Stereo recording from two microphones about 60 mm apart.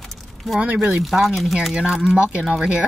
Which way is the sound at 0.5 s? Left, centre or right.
Right.